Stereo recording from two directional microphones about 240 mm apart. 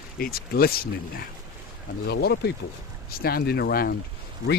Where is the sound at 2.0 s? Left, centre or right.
Left.